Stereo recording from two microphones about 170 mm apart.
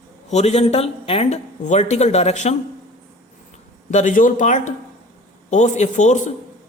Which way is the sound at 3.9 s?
45° left (ahead or behind).